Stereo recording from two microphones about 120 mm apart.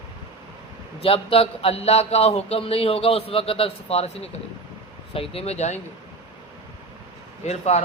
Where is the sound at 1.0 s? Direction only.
55° left (ahead or behind).